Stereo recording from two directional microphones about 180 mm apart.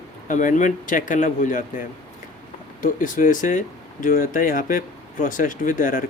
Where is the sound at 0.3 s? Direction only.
45° left (ahead or behind).